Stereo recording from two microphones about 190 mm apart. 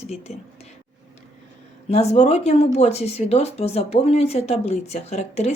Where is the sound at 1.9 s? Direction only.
35° left (ahead or behind).